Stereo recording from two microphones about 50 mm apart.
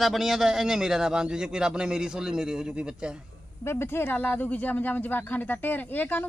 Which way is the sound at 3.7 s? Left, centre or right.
Left.